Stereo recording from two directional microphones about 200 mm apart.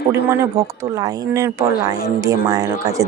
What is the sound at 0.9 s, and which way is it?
Speech, 15° right (ahead or behind).